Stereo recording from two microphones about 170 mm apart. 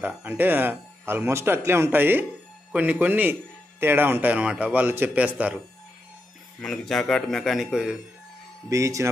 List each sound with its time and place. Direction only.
0.0 s speech: 10° right (ahead or behind)
6.6 s a man's voice: centre (ahead or behind)
8.6 s speech: 20° right (ahead or behind)